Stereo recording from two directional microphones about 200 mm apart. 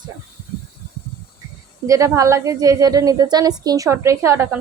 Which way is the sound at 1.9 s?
15° right (ahead or behind).